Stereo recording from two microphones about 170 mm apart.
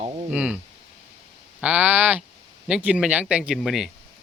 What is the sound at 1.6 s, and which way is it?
A man's voice, 5° right (ahead or behind).